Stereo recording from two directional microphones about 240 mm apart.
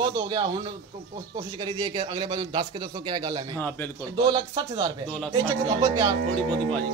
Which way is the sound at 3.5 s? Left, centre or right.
Centre.